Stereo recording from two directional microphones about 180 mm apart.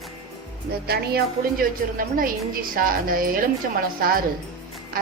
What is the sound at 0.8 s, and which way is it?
A woman's voice, 60° right (ahead or behind).